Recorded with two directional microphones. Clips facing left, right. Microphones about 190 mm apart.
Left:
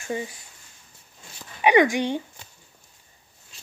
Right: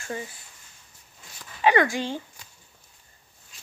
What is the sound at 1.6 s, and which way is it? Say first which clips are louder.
Speech: left 3 dB; 15° left (ahead or behind).